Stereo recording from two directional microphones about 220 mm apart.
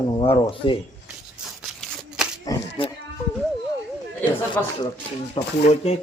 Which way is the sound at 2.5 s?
15° left (ahead or behind).